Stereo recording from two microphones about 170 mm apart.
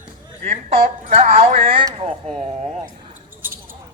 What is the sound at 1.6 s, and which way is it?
Speech, 30° right (ahead or behind).